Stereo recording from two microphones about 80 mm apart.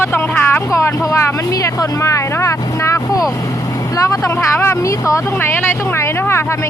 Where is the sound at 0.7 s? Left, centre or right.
Left.